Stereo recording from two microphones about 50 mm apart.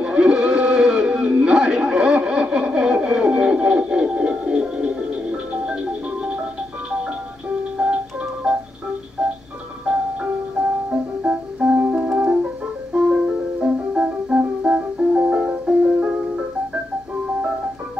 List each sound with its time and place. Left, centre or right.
0.0 s a sound: centre
7.7 s music: right
8.5 s music: centre
10.9 s music: right
11.9 s keyboard: right
12.9 s music: centre